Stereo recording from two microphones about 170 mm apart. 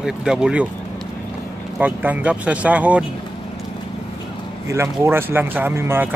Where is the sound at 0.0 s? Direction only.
5° right (ahead or behind).